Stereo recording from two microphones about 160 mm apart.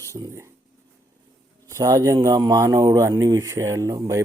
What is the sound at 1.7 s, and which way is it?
Speech, 20° right (ahead or behind).